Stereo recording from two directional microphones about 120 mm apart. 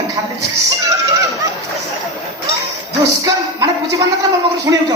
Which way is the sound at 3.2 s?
30° right (ahead or behind).